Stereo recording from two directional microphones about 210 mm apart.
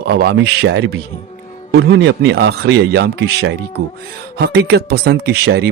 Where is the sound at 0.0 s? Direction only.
50° right (ahead or behind).